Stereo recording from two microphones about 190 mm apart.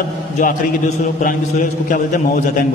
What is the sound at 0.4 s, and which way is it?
A man's voice, 45° left (ahead or behind).